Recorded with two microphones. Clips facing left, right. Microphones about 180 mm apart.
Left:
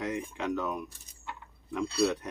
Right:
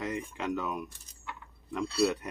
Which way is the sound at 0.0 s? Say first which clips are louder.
Left 1 dB; centre (ahead or behind).